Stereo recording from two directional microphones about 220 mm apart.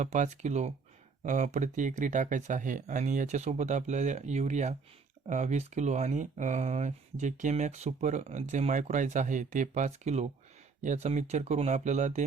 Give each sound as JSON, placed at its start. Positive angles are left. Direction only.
{"t": 0.0, "sound": "speech", "side_deg": -30}